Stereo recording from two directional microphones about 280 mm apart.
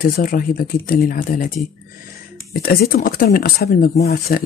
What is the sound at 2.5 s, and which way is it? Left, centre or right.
Speech, left.